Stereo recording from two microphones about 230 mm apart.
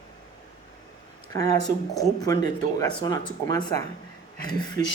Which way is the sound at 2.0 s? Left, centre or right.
Centre.